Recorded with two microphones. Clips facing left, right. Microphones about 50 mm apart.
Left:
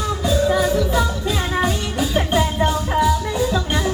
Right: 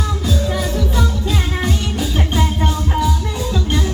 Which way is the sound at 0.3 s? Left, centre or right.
Centre.